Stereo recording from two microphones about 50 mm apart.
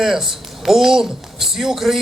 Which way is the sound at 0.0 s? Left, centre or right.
Centre.